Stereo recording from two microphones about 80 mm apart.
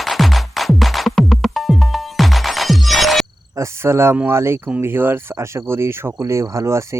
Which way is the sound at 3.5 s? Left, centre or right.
Right.